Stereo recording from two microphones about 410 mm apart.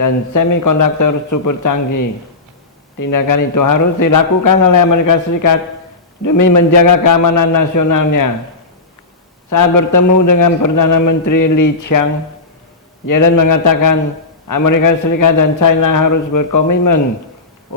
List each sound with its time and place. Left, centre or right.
0.0 s a man's voice: left
3.0 s a man's voice: left
9.5 s a man's voice: left
13.1 s a man's voice: left